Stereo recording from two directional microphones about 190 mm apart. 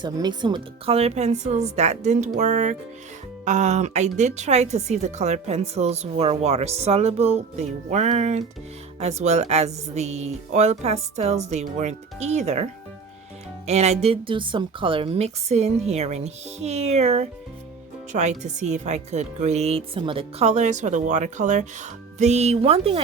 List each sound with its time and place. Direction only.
0.0 s a woman's voice: 20° right (ahead or behind)
13.7 s a woman's voice: 35° right (ahead or behind)